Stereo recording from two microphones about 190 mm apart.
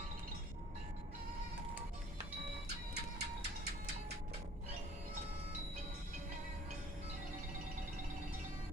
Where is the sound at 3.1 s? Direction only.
60° right (ahead or behind).